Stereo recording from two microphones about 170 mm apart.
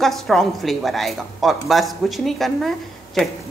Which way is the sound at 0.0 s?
Centre (ahead or behind).